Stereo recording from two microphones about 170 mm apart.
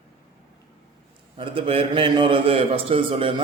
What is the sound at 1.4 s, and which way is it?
A man's voice, 35° right (ahead or behind).